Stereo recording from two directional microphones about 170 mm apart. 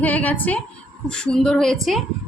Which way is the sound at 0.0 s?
10° left (ahead or behind).